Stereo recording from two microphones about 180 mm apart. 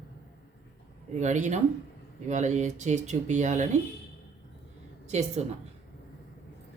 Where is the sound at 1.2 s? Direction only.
40° right (ahead or behind).